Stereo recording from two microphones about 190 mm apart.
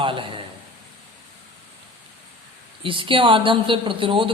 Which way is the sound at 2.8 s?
25° right (ahead or behind).